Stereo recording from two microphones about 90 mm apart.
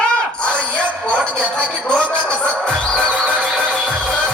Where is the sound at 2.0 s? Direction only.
15° right (ahead or behind).